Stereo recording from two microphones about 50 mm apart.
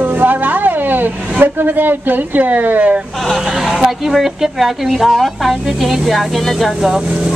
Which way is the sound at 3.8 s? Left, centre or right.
Centre.